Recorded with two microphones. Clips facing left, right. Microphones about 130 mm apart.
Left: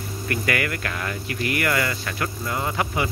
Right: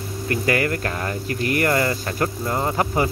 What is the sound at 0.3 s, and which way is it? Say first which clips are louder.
Speech: right 4 dB; 30° right (ahead or behind).